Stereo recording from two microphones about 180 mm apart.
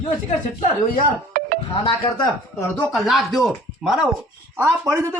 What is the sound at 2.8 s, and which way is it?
Speech, centre (ahead or behind).